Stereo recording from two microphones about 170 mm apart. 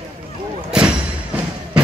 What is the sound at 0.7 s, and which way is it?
Thump, 5° right (ahead or behind).